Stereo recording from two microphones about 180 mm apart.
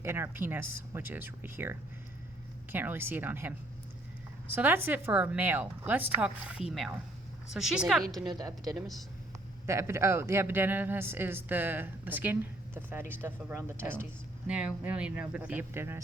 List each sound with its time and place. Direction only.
0.0 s a woman's voice: 15° right (ahead or behind)
8.4 s speech: 20° right (ahead or behind)